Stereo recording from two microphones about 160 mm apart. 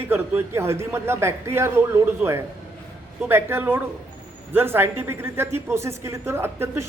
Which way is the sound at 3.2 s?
15° right (ahead or behind).